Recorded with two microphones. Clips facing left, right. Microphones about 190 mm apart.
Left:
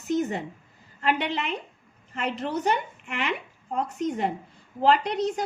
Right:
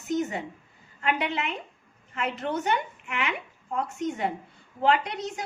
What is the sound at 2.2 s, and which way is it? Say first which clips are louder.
A woman's voice: left 2 dB; 35° left (ahead or behind).